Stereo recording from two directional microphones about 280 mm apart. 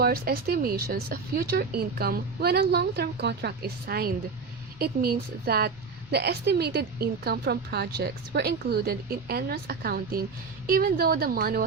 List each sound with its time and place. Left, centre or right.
0.0 s a woman's voice: right